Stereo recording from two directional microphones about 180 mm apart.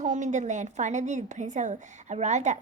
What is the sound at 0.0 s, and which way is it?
A woman's voice, 45° right (ahead or behind).